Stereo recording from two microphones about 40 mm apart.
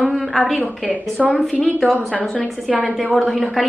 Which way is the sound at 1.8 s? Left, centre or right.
Centre.